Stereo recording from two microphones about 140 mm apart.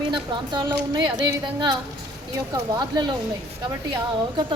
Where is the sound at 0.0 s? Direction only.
35° right (ahead or behind).